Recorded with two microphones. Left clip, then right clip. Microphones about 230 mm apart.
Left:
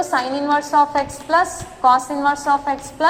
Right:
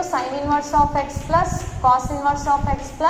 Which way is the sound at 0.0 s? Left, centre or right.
Left.